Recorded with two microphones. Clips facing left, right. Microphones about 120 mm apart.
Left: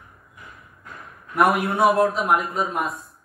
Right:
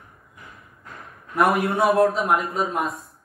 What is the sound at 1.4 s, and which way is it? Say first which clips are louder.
Speech: left 1 dB; centre (ahead or behind).